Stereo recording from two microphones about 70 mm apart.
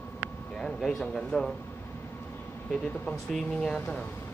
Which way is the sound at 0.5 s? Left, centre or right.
Centre.